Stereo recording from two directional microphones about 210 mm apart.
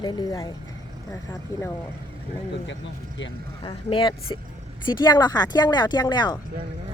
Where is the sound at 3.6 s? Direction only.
25° left (ahead or behind).